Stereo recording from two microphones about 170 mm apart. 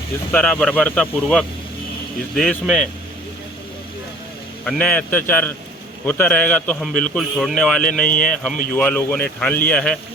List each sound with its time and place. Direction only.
0.3 s a man's voice: 10° left (ahead or behind)
4.6 s a man's voice: 10° left (ahead or behind)